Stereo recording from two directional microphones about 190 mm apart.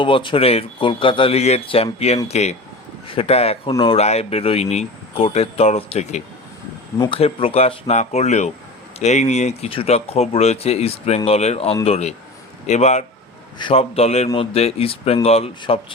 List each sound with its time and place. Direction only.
0.0 s speech: 25° left (ahead or behind)